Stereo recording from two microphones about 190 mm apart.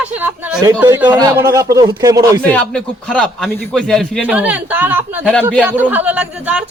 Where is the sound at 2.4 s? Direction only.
5° left (ahead or behind).